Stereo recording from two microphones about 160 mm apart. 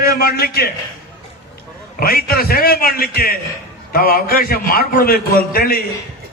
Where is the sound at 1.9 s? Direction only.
65° left (ahead or behind).